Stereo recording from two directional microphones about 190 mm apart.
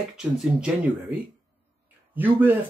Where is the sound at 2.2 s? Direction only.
10° right (ahead or behind).